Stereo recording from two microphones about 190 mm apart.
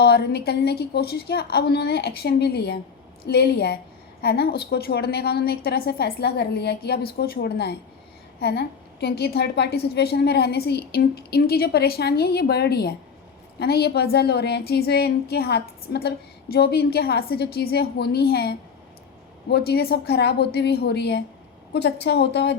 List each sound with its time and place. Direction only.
0.0 s a woman's voice: 55° left (ahead or behind)